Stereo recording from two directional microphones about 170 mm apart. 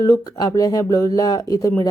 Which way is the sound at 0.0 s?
20° left (ahead or behind).